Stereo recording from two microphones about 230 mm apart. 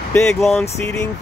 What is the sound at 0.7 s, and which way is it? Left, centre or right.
Vehicle, centre.